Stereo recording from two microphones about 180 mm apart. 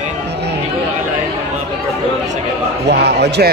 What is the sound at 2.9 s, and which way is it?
Speech, 65° right (ahead or behind).